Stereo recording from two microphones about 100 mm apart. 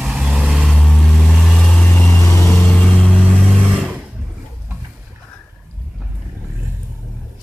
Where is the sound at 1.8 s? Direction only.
20° left (ahead or behind).